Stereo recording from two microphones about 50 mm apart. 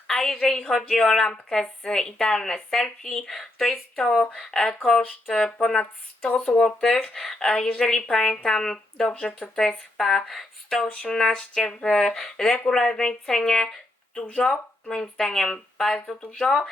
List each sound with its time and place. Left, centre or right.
0.1 s a woman's voice: centre
4.2 s a woman's voice: centre
5.4 s a woman's voice: centre
5.8 s speech: left
6.6 s a woman's voice: centre
9.0 s speech: left
9.6 s a woman's voice: centre
10.8 s a woman's voice: left